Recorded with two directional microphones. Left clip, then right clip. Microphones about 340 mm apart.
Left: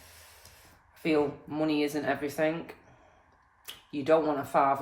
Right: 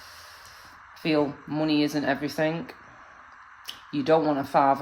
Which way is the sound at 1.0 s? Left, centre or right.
Right.